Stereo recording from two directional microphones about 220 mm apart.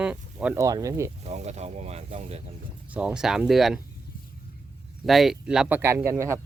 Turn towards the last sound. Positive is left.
turn(degrees=-10)  # may be behind; listen again after turning